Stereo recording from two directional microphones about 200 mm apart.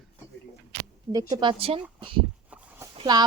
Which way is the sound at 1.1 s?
20° right (ahead or behind).